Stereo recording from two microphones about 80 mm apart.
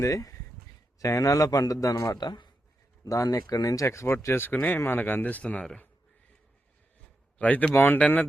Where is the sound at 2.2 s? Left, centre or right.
Left.